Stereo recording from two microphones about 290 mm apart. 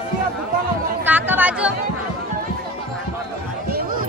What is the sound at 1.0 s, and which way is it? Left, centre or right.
Chatter, centre.